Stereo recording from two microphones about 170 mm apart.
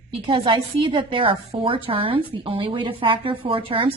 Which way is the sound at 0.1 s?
30° right (ahead or behind).